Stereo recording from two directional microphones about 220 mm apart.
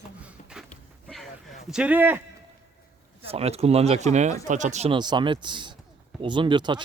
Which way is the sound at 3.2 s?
30° right (ahead or behind).